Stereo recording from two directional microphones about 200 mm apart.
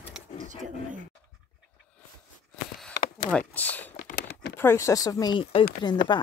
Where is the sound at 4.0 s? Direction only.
50° left (ahead or behind).